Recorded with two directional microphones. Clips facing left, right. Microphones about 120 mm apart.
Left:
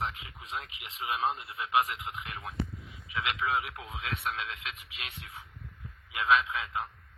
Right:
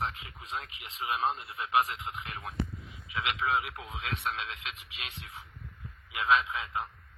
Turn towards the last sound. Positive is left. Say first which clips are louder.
# left 1 dB
turn(degrees=-30)  # may be behind; listen again after turning